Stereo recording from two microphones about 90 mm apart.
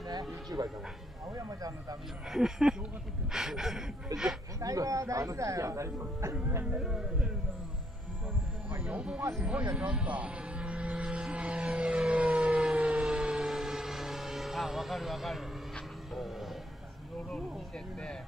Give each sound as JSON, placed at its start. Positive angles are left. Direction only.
{"t": 0.5, "sound": "speech", "side_deg": -40}
{"t": 2.2, "sound": "a sound", "side_deg": -5}
{"t": 4.6, "sound": "speech", "side_deg": -40}
{"t": 6.3, "sound": "music", "side_deg": -20}
{"t": 6.8, "sound": "a sound", "side_deg": -5}
{"t": 8.6, "sound": "music", "side_deg": -15}
{"t": 9.4, "sound": "vehicle", "side_deg": -15}
{"t": 15.7, "sound": "music", "side_deg": 0}